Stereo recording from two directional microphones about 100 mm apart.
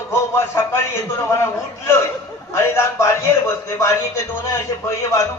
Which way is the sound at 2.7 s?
30° left (ahead or behind).